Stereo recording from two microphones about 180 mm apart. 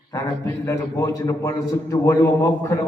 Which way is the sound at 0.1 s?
15° left (ahead or behind).